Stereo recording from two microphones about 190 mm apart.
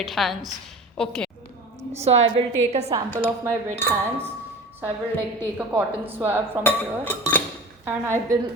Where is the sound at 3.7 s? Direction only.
10° left (ahead or behind).